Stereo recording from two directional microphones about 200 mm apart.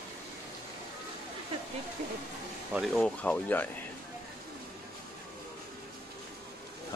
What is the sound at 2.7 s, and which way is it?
Speech, centre (ahead or behind).